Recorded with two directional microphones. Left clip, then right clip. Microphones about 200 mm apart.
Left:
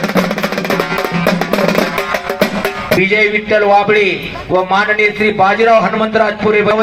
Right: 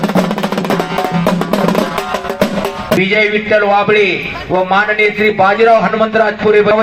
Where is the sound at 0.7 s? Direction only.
50° right (ahead or behind).